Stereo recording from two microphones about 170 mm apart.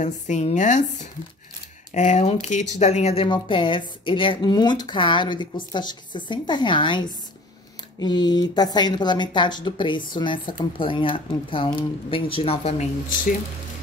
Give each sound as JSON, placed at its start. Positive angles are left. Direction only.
{"t": 0.0, "sound": "speech", "side_deg": 45}